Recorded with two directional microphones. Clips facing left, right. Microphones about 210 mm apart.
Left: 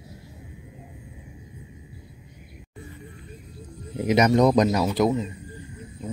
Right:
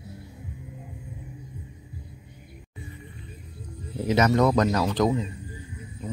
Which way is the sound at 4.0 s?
15° left (ahead or behind).